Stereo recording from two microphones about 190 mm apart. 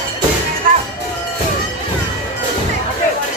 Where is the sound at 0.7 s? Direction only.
45° right (ahead or behind).